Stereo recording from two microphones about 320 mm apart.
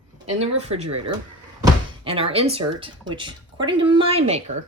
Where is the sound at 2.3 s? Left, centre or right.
Centre.